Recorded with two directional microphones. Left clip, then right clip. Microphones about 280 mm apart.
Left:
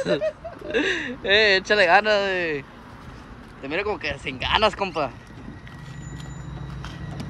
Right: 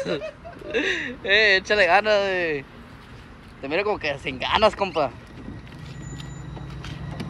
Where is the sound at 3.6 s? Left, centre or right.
Centre.